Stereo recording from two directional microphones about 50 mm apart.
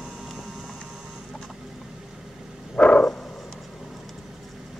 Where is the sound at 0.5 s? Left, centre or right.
Centre.